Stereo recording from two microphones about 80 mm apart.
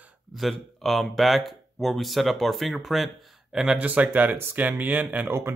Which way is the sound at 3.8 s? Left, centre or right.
Centre.